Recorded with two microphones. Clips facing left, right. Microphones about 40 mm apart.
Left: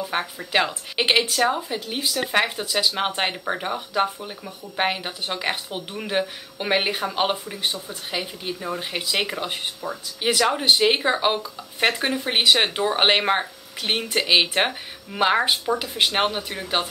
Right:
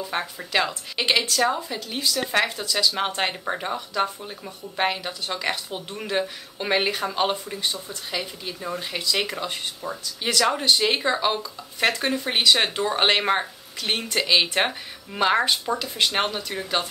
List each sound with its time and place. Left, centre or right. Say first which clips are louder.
0.0 s speech: left 2 dB; centre